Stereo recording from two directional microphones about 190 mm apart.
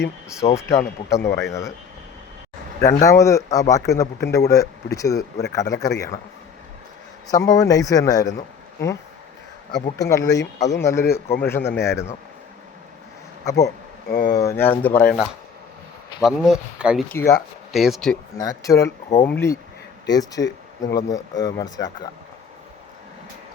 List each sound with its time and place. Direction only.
0.5 s speech: 15° left (ahead or behind)
2.8 s speech: 15° left (ahead or behind)
7.3 s speech: 20° left (ahead or behind)
9.7 s speech: 20° left (ahead or behind)
13.4 s speech: 15° left (ahead or behind)
16.2 s speech: 5° right (ahead or behind)
17.1 s speech: 10° left (ahead or behind)
17.7 s speech: centre (ahead or behind)
18.3 s speech: 20° left (ahead or behind)